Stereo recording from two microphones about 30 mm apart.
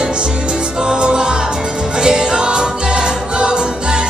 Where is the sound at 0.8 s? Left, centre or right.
Right.